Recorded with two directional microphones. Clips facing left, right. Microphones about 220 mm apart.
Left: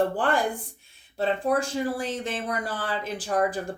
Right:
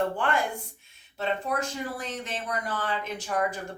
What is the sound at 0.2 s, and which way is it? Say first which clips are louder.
Speech: left 3 dB; 35° left (ahead or behind).